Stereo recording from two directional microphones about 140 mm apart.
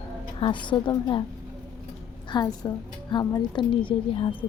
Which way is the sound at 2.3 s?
30° left (ahead or behind).